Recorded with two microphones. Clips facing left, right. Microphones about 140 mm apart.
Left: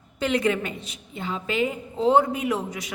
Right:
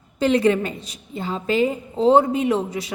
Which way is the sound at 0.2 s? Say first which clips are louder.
Right 6 dB; 30° right (ahead or behind).